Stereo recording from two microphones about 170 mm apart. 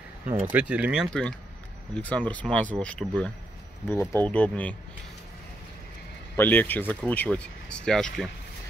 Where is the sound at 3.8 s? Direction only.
15° left (ahead or behind).